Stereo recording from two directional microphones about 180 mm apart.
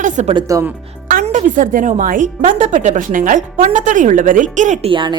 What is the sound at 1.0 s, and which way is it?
A woman's voice, 45° right (ahead or behind).